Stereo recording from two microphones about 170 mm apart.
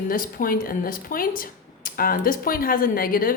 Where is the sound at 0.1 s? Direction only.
55° left (ahead or behind).